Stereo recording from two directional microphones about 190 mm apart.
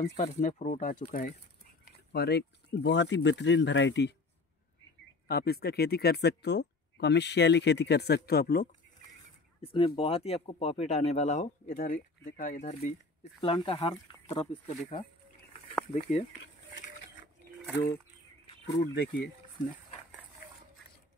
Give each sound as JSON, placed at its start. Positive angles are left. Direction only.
{"t": 0.0, "sound": "speech", "side_deg": 35}
{"t": 2.1, "sound": "speech", "side_deg": 60}
{"t": 5.3, "sound": "speech", "side_deg": 55}
{"t": 9.6, "sound": "speech", "side_deg": 30}
{"t": 18.9, "sound": "speech", "side_deg": 50}